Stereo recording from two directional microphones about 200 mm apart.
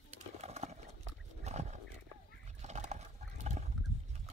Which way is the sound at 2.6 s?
35° right (ahead or behind).